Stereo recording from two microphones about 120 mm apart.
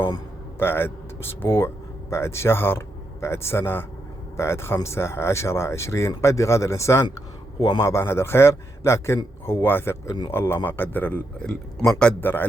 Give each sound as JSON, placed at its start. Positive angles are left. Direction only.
{"t": 0.6, "sound": "a man's voice", "side_deg": 20}